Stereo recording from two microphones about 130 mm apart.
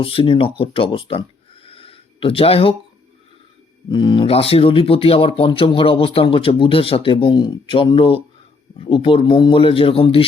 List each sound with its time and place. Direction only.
0.0 s speech: 45° left (ahead or behind)
1.6 s a sound: 45° left (ahead or behind)
3.8 s speech: 35° left (ahead or behind)